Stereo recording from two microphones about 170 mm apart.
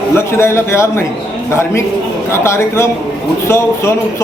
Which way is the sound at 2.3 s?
15° left (ahead or behind).